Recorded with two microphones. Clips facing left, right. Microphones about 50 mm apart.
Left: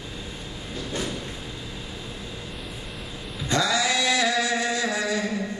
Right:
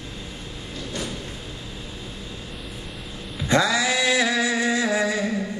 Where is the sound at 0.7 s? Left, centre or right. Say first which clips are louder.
Left 1 dB; centre.